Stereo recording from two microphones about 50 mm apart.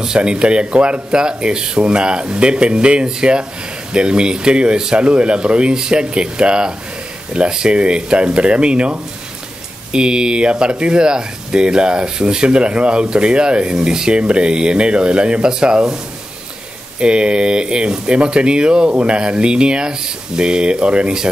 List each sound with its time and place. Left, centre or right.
0.0 s speech: centre
17.0 s speech: centre